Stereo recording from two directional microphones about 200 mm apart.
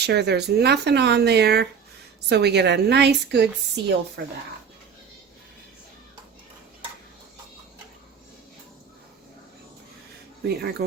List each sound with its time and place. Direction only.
0.0 s speech: 55° right (ahead or behind)
10.4 s speech: 55° right (ahead or behind)